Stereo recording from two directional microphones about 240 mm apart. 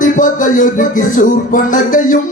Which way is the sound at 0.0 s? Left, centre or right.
Left.